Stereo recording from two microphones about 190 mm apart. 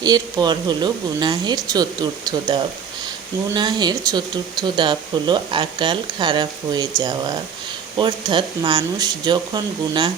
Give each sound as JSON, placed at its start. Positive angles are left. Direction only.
{"t": 0.0, "sound": "speech", "side_deg": -20}